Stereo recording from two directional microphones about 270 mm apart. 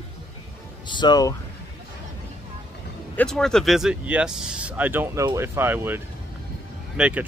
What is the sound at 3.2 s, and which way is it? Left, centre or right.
Speech, centre.